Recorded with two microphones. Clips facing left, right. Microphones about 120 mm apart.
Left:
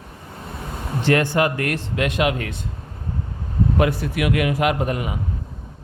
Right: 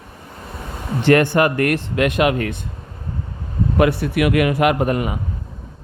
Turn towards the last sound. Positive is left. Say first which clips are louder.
# right 4 dB
turn(degrees=-50)  # may be behind; listen again after turning